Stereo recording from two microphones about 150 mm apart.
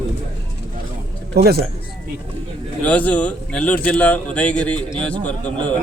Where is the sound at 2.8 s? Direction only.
10° left (ahead or behind).